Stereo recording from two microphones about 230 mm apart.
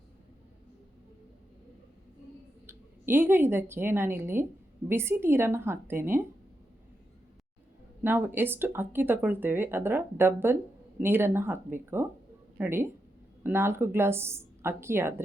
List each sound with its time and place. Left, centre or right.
2.6 s a woman's voice: centre
8.0 s speech: centre